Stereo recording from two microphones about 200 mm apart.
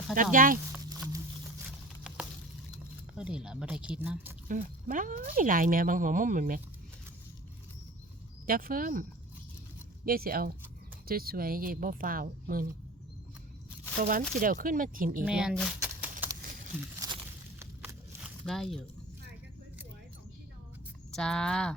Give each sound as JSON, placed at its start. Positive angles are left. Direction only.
{"t": 0.1, "sound": "speech", "side_deg": -45}
{"t": 0.7, "sound": "a sound", "side_deg": -15}
{"t": 3.2, "sound": "speech", "side_deg": -5}
{"t": 4.4, "sound": "speech", "side_deg": -40}
{"t": 8.4, "sound": "speech", "side_deg": -45}
{"t": 10.1, "sound": "speech", "side_deg": -50}
{"t": 14.0, "sound": "speech", "side_deg": -45}
{"t": 15.2, "sound": "speech", "side_deg": -5}
{"t": 17.0, "sound": "a sound", "side_deg": -15}
{"t": 18.4, "sound": "speech", "side_deg": 0}
{"t": 21.1, "sound": "speech", "side_deg": 5}